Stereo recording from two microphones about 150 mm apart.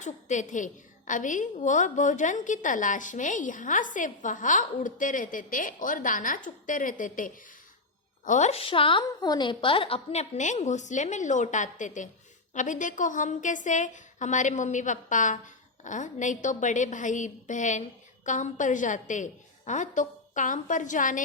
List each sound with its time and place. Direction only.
0.0 s a woman's voice: 55° left (ahead or behind)